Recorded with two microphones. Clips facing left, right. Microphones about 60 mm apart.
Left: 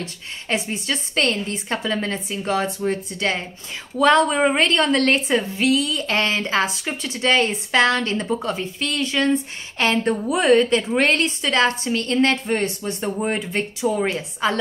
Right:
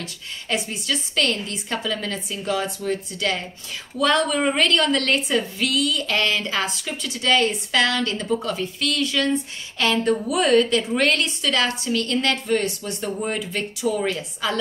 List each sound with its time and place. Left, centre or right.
0.5 s a woman's voice: left